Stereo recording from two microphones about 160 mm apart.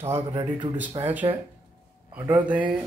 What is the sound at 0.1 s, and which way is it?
Speech, 20° right (ahead or behind).